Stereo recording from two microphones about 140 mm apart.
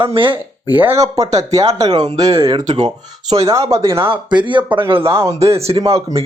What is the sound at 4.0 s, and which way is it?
Speech, 35° right (ahead or behind).